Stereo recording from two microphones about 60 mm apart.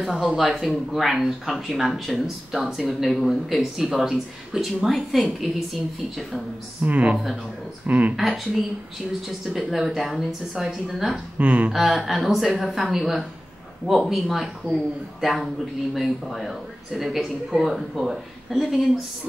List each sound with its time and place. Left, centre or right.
0.0 s speech: centre
6.8 s speech: right
9.6 s speech: centre
11.3 s speech: right
11.7 s speech: centre